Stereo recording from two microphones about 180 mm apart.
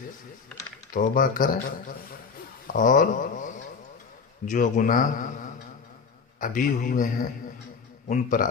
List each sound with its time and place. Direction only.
0.9 s speech: 45° left (ahead or behind)
2.6 s speech: 50° left (ahead or behind)
6.4 s speech: 50° left (ahead or behind)